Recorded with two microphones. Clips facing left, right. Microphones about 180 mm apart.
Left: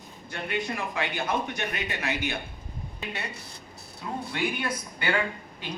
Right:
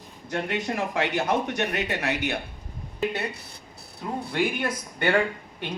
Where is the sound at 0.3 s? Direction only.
80° right.